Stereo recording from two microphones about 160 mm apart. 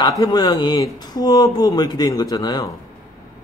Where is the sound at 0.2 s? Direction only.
25° left (ahead or behind).